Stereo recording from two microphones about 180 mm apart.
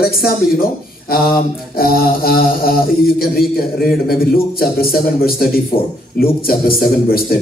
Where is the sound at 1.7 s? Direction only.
55° left (ahead or behind).